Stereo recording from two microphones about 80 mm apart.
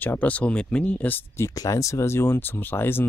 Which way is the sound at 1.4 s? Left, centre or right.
Left.